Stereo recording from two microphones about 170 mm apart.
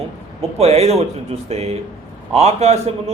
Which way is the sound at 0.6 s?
40° right (ahead or behind).